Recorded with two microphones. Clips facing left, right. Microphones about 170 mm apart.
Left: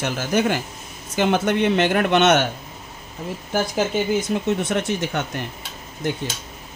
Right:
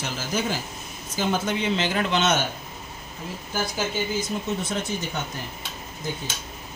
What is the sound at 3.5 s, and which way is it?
Speech, 65° left (ahead or behind).